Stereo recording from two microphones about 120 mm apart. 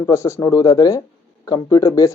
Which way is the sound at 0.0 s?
25° left (ahead or behind).